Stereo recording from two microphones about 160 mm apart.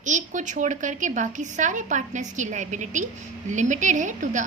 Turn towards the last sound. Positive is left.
turn(degrees=-50)  # may be behind; listen again after turning